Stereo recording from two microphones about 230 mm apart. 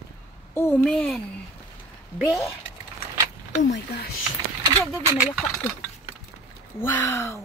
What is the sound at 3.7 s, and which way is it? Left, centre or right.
Speech, left.